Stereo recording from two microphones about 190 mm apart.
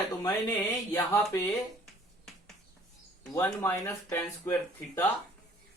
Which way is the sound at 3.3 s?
15° left (ahead or behind).